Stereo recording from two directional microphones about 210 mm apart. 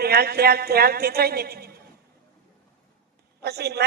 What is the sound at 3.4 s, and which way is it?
Speech, 50° right (ahead or behind).